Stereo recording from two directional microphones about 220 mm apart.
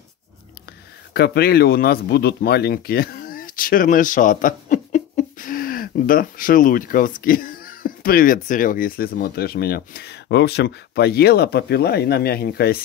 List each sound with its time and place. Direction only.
1.1 s speech: 45° left (ahead or behind)